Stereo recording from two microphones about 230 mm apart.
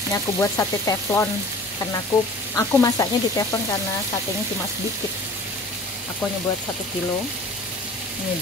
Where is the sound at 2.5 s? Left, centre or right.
Centre.